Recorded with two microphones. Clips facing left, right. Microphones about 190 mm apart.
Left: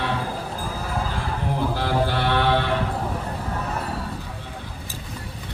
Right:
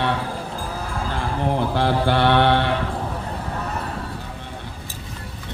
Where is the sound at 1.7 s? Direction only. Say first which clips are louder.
Right 4 dB; 65° right (ahead or behind).